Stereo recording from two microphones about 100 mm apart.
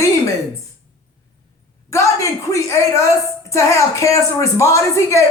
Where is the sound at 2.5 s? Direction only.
30° left (ahead or behind).